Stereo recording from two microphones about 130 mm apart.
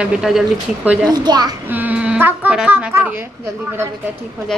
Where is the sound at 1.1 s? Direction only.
30° right (ahead or behind).